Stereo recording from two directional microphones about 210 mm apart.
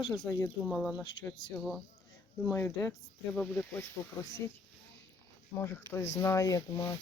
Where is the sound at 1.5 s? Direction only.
Centre (ahead or behind).